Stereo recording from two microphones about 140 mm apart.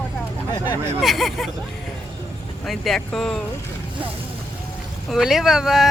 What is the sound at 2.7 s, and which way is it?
Speech, centre (ahead or behind).